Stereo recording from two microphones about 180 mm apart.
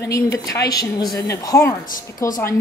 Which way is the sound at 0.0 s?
20° left (ahead or behind).